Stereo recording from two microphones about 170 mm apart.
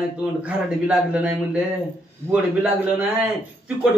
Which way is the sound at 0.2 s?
5° right (ahead or behind).